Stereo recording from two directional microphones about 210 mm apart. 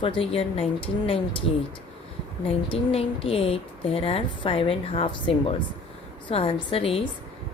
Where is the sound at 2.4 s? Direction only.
25° left (ahead or behind).